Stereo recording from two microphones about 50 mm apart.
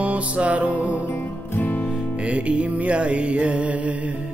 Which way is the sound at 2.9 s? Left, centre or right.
Right.